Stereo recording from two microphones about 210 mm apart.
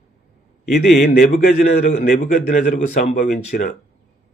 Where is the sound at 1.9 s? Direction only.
35° left (ahead or behind).